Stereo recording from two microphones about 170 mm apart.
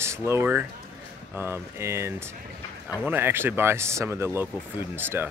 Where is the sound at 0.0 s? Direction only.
15° right (ahead or behind).